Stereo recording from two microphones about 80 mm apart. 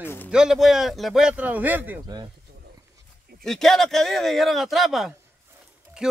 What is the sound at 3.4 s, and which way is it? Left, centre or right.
Speech, centre.